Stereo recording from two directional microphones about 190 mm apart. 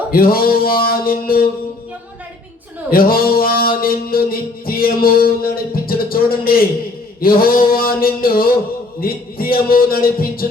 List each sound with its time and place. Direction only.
0.1 s a man's voice: 50° left (ahead or behind)
2.9 s music: 50° left (ahead or behind)
7.2 s a man's voice: 50° left (ahead or behind)